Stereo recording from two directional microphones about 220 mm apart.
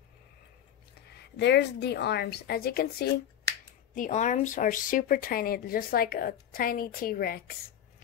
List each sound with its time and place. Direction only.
1.3 s a woman's voice: 50° left (ahead or behind)
3.9 s a woman's voice: 35° left (ahead or behind)